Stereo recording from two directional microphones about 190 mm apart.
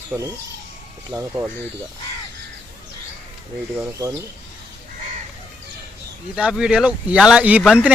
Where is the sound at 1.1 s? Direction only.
20° right (ahead or behind).